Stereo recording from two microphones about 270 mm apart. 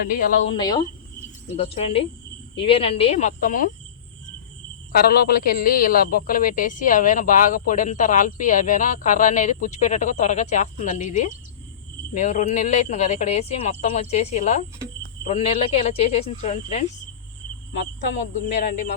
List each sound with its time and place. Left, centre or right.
0.4 s speech: centre
4.9 s speech: left
17.7 s speech: left
18.6 s speech: left